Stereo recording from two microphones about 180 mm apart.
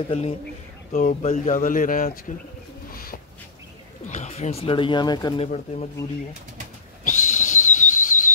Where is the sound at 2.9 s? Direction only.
55° left (ahead or behind).